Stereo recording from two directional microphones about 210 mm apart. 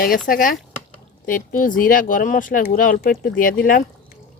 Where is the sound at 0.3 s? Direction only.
40° left (ahead or behind).